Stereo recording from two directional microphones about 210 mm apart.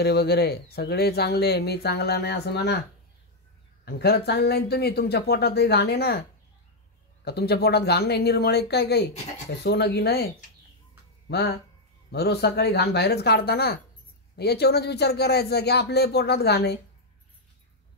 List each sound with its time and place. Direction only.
0.0 s speech: 50° left (ahead or behind)
3.8 s speech: 50° left (ahead or behind)
7.2 s speech: 50° left (ahead or behind)